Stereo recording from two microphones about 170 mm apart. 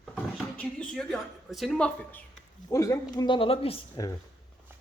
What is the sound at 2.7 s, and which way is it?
Speech, 20° left (ahead or behind).